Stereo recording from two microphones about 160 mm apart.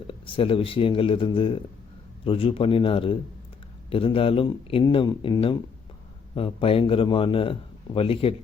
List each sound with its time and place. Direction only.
0.1 s speech: 35° left (ahead or behind)